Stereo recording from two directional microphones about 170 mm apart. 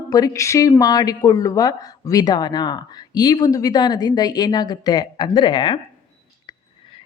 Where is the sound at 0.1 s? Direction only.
20° left (ahead or behind).